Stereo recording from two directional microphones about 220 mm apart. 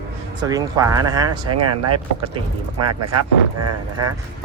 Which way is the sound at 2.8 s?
90° right.